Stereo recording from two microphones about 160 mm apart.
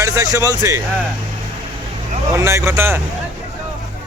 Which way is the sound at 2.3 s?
15° right (ahead or behind).